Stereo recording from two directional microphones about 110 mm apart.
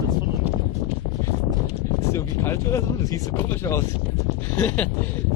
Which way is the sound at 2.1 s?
25° left (ahead or behind).